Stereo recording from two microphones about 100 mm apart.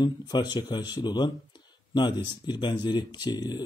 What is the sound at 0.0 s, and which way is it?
Speech, 45° left (ahead or behind).